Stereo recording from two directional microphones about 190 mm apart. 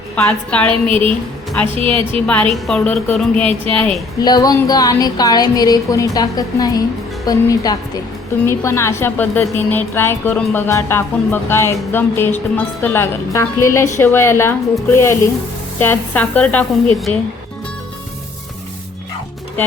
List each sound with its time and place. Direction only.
0.3 s a woman's voice: 5° left (ahead or behind)
0.7 s a woman's voice: 30° right (ahead or behind)
2.5 s a woman's voice: 5° left (ahead or behind)
4.2 s a woman's voice: 20° left (ahead or behind)